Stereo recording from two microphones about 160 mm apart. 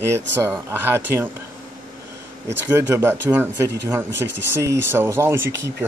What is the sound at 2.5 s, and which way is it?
A man's voice, 15° right (ahead or behind).